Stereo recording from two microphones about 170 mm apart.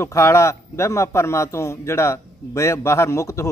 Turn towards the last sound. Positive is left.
turn(degrees=15)  # may be behind; listen again after turning